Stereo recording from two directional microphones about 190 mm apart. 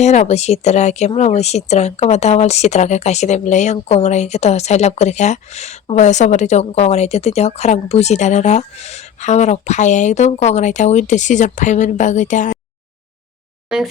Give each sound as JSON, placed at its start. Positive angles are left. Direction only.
{"t": 0.0, "sound": "speech", "side_deg": 35}
{"t": 13.7, "sound": "speech", "side_deg": -5}